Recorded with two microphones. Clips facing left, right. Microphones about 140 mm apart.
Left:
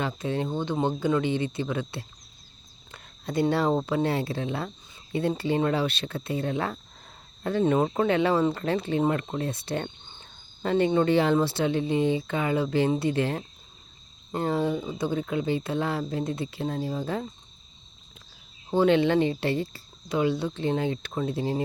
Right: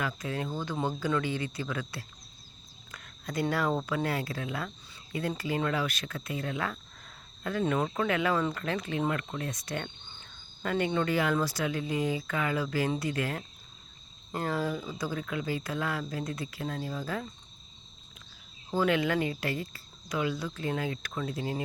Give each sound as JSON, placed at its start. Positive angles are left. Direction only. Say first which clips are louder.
{"t": 0.0, "sound": "speech", "louder": "left 5 dB", "side_deg": 25}
{"t": 18.7, "sound": "speech", "louder": "left 6 dB", "side_deg": 30}